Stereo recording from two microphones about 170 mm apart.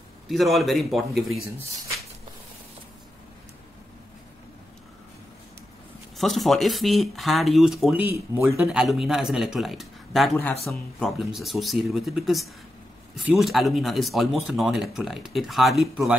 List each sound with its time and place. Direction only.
0.3 s speech: centre (ahead or behind)
6.1 s speech: centre (ahead or behind)
8.1 s speech: 15° right (ahead or behind)
8.5 s speech: centre (ahead or behind)